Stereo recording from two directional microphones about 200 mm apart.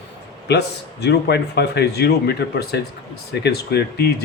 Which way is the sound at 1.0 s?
55° left (ahead or behind).